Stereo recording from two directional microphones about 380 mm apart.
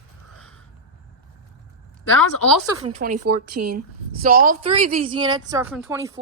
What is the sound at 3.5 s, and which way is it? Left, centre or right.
Speech, right.